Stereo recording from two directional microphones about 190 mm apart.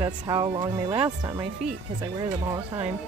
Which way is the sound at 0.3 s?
20° right (ahead or behind).